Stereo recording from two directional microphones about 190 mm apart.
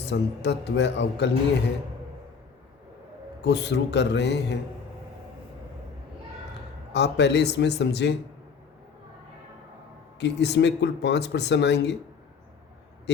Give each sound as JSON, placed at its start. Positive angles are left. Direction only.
{"t": 0.1, "sound": "speech", "side_deg": 65}
{"t": 3.4, "sound": "speech", "side_deg": 65}
{"t": 6.9, "sound": "speech", "side_deg": 65}
{"t": 10.2, "sound": "speech", "side_deg": 65}